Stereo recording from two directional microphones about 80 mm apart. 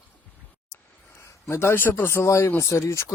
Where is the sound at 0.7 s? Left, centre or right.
Left.